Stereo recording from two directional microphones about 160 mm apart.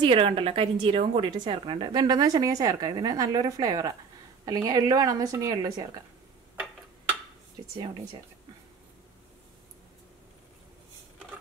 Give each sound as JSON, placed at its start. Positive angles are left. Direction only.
{"t": 0.0, "sound": "a woman's voice", "side_deg": -35}